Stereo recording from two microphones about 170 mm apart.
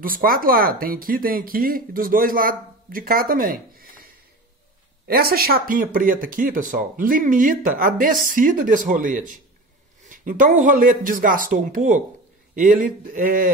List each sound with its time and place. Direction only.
0.0 s speech: 55° right (ahead or behind)